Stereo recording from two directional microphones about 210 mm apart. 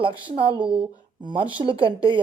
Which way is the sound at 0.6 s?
5° right (ahead or behind).